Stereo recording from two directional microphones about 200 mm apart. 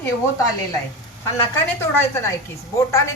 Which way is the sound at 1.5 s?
15° left (ahead or behind).